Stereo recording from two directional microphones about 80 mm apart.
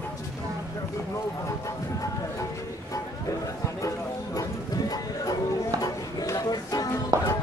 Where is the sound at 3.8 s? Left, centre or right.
Left.